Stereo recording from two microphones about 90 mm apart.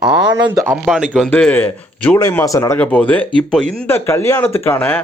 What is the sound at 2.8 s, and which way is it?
Speech, 15° left (ahead or behind).